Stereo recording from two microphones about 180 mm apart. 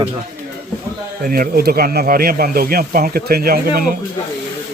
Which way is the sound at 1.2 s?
50° right (ahead or behind).